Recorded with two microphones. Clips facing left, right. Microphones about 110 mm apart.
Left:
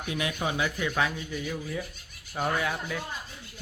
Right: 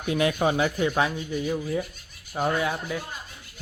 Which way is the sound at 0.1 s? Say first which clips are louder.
Right 8 dB; 45° right (ahead or behind).